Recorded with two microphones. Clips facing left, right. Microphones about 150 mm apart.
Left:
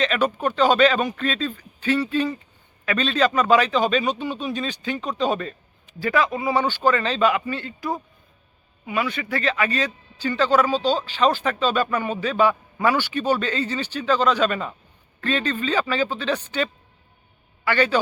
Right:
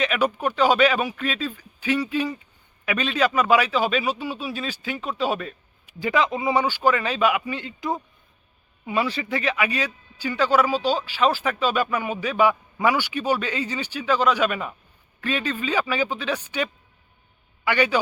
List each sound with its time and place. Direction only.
0.0 s speech: 10° right (ahead or behind)
6.0 s speech: 20° right (ahead or behind)
9.3 s speech: 10° right (ahead or behind)
17.7 s speech: 10° right (ahead or behind)